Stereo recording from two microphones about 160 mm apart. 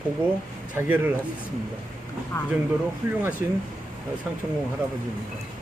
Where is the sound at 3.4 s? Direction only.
10° right (ahead or behind).